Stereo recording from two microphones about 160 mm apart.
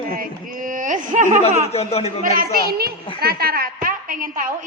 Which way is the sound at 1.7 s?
40° left (ahead or behind).